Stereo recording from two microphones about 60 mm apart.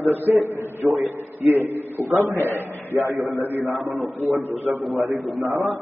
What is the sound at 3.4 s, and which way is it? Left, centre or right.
Speech, right.